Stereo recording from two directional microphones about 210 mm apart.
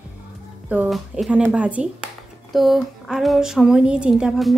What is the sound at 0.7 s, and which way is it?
Speech, 5° right (ahead or behind).